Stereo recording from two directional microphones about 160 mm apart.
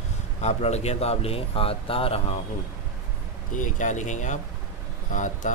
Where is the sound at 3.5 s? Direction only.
50° left (ahead or behind).